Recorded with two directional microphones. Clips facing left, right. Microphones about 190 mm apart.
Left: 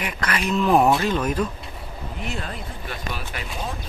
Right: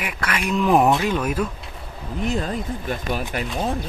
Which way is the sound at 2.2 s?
40° right (ahead or behind).